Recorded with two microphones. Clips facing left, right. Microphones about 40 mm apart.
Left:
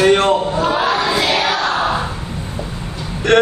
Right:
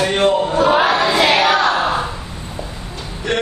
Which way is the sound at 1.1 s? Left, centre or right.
Right.